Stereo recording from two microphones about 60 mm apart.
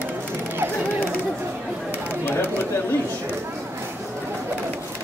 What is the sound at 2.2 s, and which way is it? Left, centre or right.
Bird, left.